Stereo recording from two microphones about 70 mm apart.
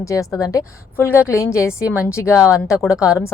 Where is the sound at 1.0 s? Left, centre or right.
Left.